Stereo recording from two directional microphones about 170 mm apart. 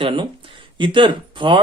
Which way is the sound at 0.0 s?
30° right (ahead or behind).